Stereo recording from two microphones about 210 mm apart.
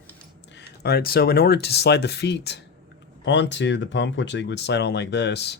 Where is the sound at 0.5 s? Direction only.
50° left (ahead or behind).